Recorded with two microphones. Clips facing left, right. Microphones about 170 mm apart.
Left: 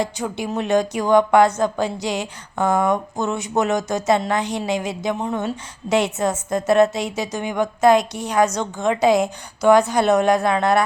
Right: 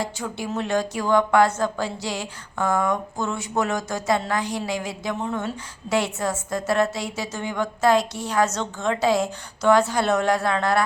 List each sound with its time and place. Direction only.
0.0 s speech: 20° left (ahead or behind)